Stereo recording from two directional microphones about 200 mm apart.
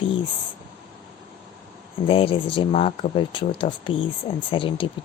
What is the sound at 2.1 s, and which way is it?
Speech, 25° left (ahead or behind).